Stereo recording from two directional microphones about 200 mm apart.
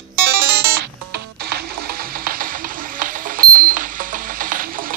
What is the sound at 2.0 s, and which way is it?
Stir, 45° right (ahead or behind).